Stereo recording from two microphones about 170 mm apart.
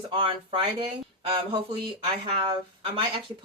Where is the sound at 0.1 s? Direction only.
30° right (ahead or behind).